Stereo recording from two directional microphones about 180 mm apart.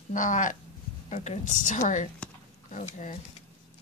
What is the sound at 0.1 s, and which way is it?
Speech, 45° left (ahead or behind).